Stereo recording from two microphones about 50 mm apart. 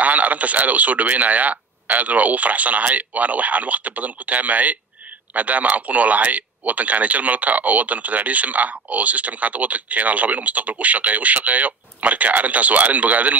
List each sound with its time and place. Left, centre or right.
0.0 s speech: right